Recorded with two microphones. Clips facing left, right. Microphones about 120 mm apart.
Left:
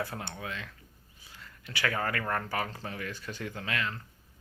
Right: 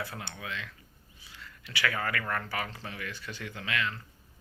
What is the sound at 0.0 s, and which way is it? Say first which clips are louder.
Speech: left 3 dB; 40° left (ahead or behind).